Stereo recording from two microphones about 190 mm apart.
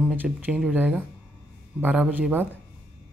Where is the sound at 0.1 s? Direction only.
10° right (ahead or behind).